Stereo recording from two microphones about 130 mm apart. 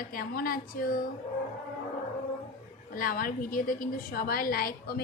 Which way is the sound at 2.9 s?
90° left.